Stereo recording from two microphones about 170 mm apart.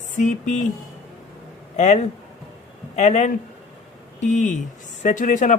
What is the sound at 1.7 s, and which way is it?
A man's voice, 45° left (ahead or behind).